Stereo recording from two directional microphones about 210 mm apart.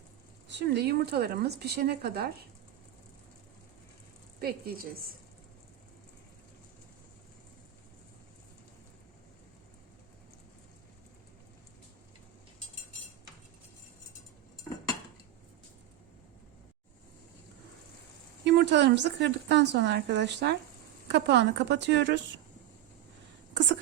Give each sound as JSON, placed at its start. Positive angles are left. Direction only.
{"t": 0.4, "sound": "speech", "side_deg": -55}
{"t": 4.4, "sound": "a woman's voice", "side_deg": -45}
{"t": 18.4, "sound": "speech", "side_deg": -55}